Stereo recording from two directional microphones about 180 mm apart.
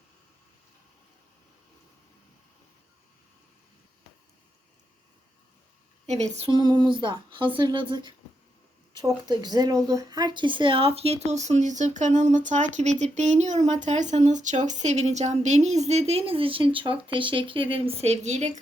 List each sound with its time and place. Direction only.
6.1 s speech: 40° right (ahead or behind)